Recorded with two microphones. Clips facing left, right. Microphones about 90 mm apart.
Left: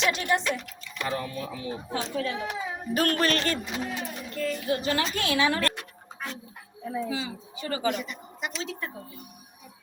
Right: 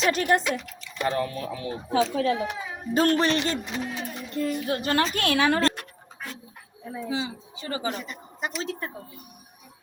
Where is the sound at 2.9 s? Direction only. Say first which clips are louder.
Right 4 dB; 25° right (ahead or behind).